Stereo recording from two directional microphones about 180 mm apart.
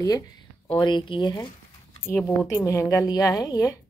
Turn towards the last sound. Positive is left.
turn(degrees=20)  # may be behind; listen again after turning